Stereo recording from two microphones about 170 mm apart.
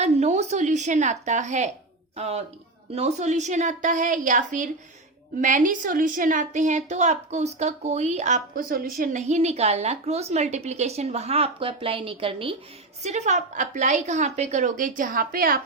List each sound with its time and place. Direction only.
0.0 s a woman's voice: 40° right (ahead or behind)
13.0 s a woman's voice: 40° right (ahead or behind); by 15.6 s 55° right (ahead or behind)